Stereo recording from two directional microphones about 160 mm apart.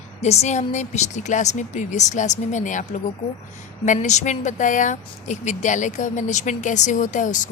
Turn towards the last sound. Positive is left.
turn(degrees=50)  # may be behind; listen again after turning